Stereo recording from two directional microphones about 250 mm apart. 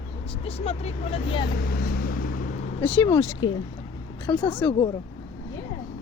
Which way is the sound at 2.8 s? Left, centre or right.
Centre.